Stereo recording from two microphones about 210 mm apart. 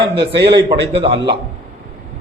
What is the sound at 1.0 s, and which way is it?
Speech, 25° right (ahead or behind).